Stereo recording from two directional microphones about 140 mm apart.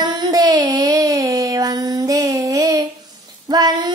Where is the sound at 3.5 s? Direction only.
30° right (ahead or behind).